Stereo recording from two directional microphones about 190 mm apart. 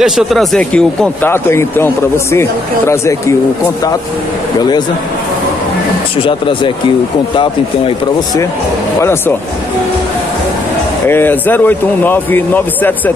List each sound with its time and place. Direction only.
0.0 s speech: centre (ahead or behind)
2.9 s speech: 15° left (ahead or behind)
4.6 s speech: 20° left (ahead or behind)
6.2 s speech: 25° left (ahead or behind)
11.1 s speech: 10° left (ahead or behind)